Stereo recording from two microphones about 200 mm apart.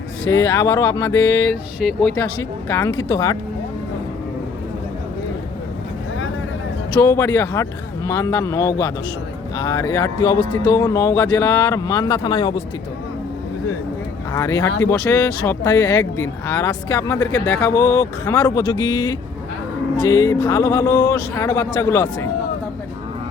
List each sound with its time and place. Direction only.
0.3 s speech: 15° left (ahead or behind)
1.8 s speech: centre (ahead or behind)
7.0 s speech: 15° left (ahead or behind)
14.3 s speech: 15° left (ahead or behind)